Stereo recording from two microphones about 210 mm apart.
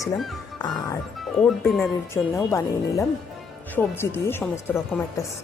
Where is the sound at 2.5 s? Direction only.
15° left (ahead or behind).